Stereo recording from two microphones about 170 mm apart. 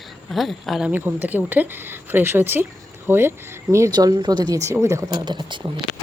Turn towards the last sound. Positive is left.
turn(degrees=-25)  # may be behind; listen again after turning